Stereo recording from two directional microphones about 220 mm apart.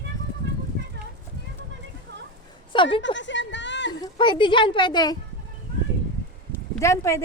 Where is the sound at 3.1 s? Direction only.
55° left (ahead or behind).